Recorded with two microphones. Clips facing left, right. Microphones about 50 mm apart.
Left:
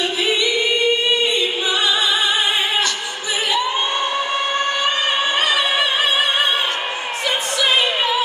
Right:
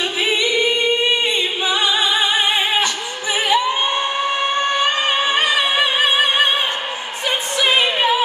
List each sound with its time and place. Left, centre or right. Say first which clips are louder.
0.2 s a capella: right 2 dB; right
4.7 s music: right 1 dB; right